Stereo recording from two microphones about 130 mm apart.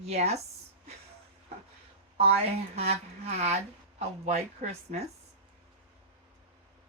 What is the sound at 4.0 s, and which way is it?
Speech, 55° right (ahead or behind).